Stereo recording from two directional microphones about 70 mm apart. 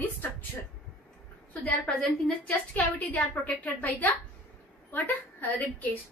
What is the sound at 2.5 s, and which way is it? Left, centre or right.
A woman's voice, left.